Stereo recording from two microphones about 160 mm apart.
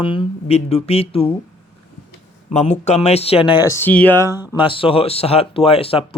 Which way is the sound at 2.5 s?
45° left (ahead or behind).